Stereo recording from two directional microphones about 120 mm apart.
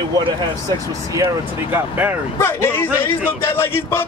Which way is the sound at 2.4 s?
20° left (ahead or behind).